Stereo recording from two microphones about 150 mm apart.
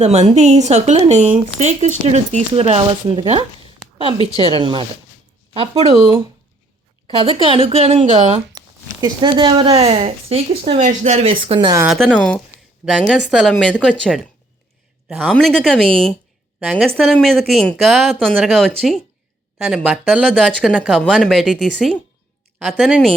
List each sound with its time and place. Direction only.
0.0 s a woman's voice: 45° right (ahead or behind)
8.5 s speech: 25° right (ahead or behind)
10.8 s a woman's voice: 50° right (ahead or behind); by 11.8 s 30° right (ahead or behind)
11.9 s a man's voice: centre (ahead or behind)